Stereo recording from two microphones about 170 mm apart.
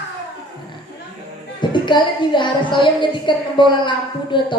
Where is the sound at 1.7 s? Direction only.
30° left (ahead or behind).